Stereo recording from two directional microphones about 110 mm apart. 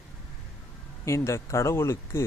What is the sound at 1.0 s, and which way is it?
Speech, 25° left (ahead or behind).